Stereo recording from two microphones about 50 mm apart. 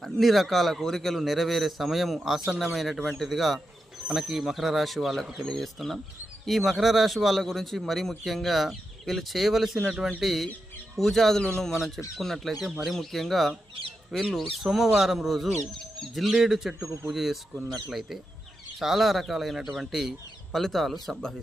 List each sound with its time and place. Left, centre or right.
0.0 s speech: centre
11.4 s speech: centre
12.1 s speech: centre
16.2 s a man's voice: centre
18.8 s speech: centre